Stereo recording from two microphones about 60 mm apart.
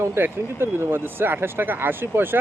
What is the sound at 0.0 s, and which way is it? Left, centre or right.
Speech, right.